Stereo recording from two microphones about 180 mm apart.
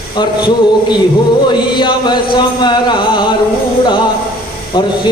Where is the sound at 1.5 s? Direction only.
25° left (ahead or behind).